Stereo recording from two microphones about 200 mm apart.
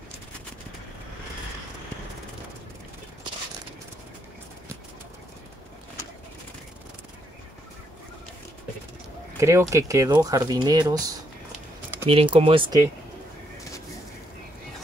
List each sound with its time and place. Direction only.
9.4 s speech: 15° right (ahead or behind)